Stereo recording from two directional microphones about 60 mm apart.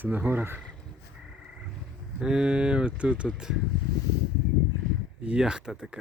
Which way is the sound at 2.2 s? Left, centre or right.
Centre.